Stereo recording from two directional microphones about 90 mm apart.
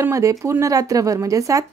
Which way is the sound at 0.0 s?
35° right (ahead or behind).